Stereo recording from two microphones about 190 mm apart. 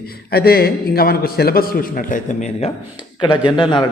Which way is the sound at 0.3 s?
55° left (ahead or behind).